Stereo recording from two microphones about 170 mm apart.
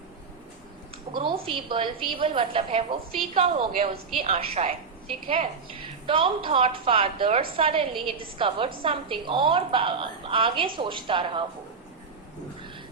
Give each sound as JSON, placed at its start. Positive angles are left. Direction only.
{"t": 1.7, "sound": "a woman's voice", "side_deg": -30}